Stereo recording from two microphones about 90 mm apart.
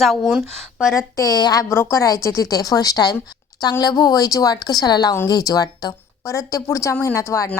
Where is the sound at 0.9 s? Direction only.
40° left (ahead or behind).